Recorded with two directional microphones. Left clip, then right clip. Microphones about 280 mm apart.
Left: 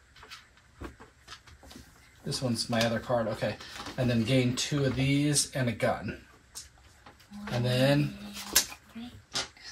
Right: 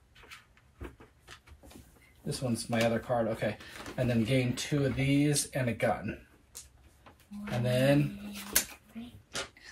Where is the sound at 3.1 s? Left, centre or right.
Centre.